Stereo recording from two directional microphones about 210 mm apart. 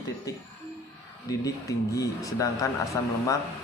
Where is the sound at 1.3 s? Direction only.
15° left (ahead or behind).